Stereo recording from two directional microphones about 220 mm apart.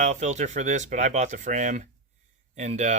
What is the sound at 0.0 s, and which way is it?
Speech, 30° right (ahead or behind).